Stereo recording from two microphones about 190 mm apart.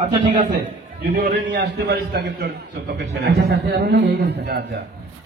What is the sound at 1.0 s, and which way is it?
A man's voice, 50° right (ahead or behind).